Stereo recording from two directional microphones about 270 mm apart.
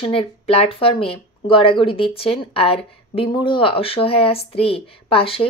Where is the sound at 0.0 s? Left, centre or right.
Centre.